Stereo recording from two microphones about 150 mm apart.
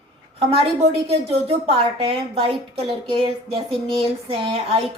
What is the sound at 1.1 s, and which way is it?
A woman's voice, 40° right (ahead or behind).